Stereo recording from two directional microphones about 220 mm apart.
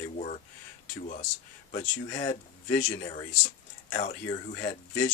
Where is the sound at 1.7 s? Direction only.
30° left (ahead or behind).